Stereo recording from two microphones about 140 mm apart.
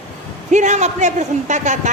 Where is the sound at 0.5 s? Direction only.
55° right (ahead or behind).